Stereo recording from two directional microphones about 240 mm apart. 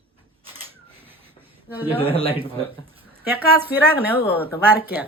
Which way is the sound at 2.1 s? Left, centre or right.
Left.